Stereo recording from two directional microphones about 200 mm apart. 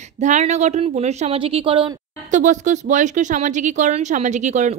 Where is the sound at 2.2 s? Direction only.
40° right (ahead or behind).